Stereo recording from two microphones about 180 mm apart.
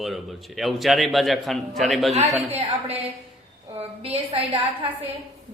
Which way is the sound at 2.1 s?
40° right (ahead or behind).